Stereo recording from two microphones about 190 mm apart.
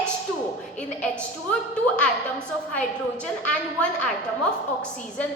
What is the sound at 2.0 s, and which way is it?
A woman's voice, 5° left (ahead or behind).